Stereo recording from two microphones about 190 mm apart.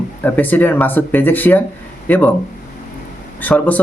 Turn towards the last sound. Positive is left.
turn(degrees=10)  # may be behind; listen again after turning